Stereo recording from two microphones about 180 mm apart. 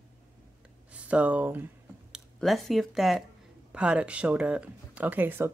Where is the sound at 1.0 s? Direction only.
10° right (ahead or behind).